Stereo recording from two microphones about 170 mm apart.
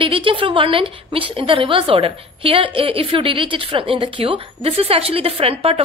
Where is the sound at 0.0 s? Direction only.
30° right (ahead or behind).